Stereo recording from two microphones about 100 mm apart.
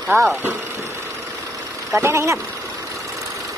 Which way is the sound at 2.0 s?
25° right (ahead or behind).